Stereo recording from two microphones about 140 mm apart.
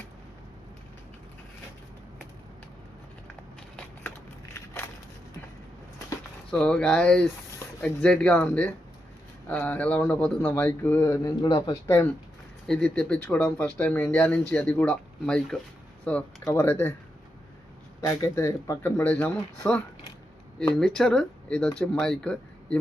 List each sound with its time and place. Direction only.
4.5 s crushing: 20° left (ahead or behind)
6.5 s speech: 5° left (ahead or behind)
12.6 s speech: 5° left (ahead or behind)
18.0 s speech: 20° left (ahead or behind)